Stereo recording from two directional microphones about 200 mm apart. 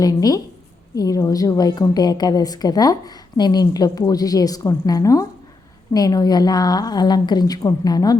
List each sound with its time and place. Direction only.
0.0 s a woman's voice: 20° left (ahead or behind)